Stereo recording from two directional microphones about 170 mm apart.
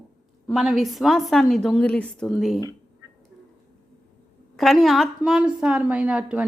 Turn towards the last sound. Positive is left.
turn(degrees=-5)  # may be behind; listen again after turning